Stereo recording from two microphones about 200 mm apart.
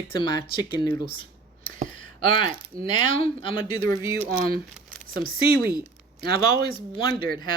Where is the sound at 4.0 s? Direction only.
15° right (ahead or behind).